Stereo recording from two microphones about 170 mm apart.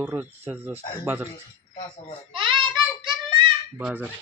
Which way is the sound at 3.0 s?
30° right (ahead or behind).